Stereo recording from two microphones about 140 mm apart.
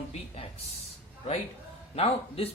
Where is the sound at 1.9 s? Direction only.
45° left (ahead or behind).